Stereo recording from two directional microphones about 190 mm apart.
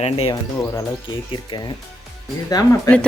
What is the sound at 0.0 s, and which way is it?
Speech, 30° left (ahead or behind).